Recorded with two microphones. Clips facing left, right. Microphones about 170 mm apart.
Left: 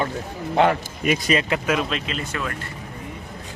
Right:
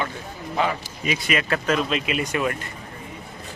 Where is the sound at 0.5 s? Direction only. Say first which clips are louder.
Left 6 dB; 60° left (ahead or behind).